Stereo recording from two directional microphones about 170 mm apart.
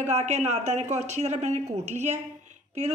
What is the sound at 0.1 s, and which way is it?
Speech, 40° right (ahead or behind).